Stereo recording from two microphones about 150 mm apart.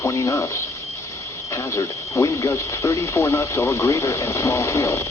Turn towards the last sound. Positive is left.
turn(degrees=20)  # may be behind; listen again after turning